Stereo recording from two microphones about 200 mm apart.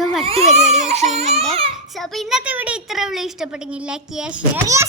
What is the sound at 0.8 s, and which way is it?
Baby cry, 35° right (ahead or behind).